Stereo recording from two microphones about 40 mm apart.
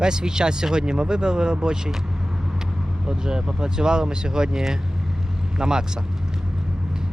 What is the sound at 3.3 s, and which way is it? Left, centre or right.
Speech, centre.